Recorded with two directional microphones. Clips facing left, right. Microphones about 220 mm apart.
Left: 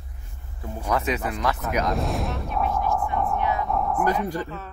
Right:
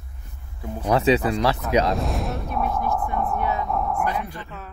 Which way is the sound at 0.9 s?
30° right (ahead or behind).